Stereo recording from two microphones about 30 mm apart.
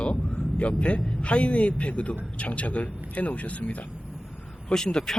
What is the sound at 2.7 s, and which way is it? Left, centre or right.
Speech, left.